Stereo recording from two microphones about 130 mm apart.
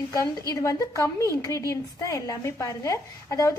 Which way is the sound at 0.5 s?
25° left (ahead or behind).